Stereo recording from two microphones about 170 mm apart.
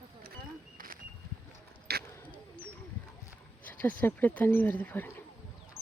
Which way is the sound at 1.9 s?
70° right (ahead or behind).